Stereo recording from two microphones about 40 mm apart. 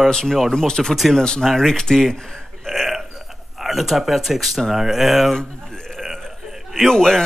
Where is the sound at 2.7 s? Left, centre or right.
Centre.